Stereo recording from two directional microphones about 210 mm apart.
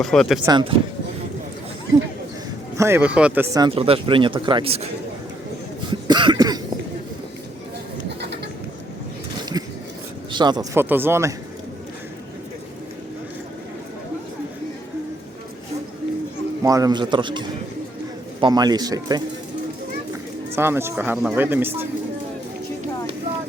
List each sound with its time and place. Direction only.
0.0 s speech: centre (ahead or behind)
0.4 s speech: 25° right (ahead or behind)
2.7 s speech: 10° right (ahead or behind)
3.7 s speech: 25° right (ahead or behind)
5.9 s speech: 20° right (ahead or behind)
10.3 s speech: 20° right (ahead or behind)
16.6 s speech: 15° right (ahead or behind)
20.6 s speech: 10° right (ahead or behind)